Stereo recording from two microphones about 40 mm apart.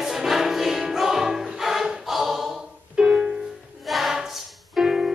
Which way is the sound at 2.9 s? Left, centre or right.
Centre.